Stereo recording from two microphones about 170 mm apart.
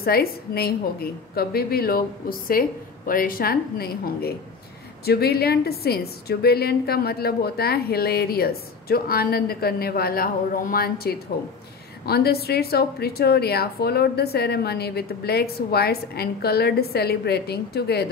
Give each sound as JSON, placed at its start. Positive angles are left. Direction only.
{"t": 0.0, "sound": "a woman's voice", "side_deg": 65}